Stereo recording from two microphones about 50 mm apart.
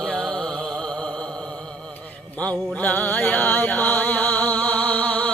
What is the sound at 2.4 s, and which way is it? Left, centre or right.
Music, left.